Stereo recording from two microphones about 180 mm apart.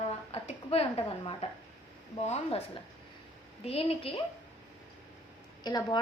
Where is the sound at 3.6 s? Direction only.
35° left (ahead or behind).